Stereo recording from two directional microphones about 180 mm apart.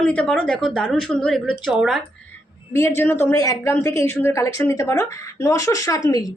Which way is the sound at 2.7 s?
15° left (ahead or behind).